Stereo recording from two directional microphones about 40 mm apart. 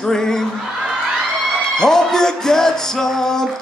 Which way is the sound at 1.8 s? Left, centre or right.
Centre.